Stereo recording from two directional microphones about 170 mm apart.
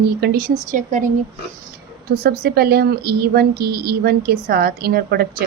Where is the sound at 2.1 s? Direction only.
65° right (ahead or behind).